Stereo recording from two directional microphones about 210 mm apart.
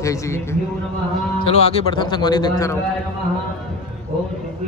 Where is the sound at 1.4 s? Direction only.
30° left (ahead or behind).